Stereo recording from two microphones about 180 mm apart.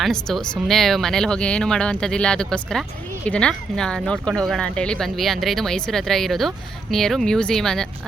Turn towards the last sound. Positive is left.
turn(degrees=5)  # may be behind; listen again after turning